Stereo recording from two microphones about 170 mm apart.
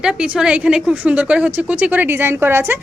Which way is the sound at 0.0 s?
5° right (ahead or behind).